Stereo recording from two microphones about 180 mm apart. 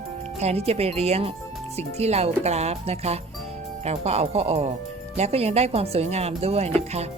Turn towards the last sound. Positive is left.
turn(degrees=-35)  # may be behind; listen again after turning